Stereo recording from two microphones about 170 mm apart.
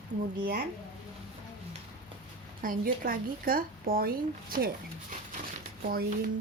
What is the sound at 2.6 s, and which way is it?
A woman's voice, 55° right (ahead or behind).